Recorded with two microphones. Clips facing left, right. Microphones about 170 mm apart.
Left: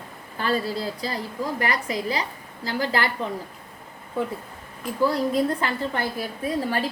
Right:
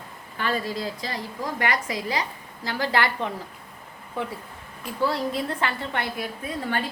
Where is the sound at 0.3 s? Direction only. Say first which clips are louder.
Left 2 dB; 35° left (ahead or behind).